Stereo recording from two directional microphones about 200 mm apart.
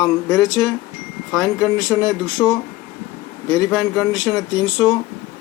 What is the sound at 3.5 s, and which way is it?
Speech, centre (ahead or behind).